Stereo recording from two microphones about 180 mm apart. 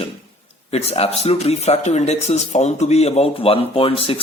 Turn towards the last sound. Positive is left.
turn(degrees=35)  # may be behind; listen again after turning